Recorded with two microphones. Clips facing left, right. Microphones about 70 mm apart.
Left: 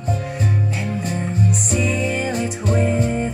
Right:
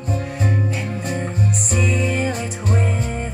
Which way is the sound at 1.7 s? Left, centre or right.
Right.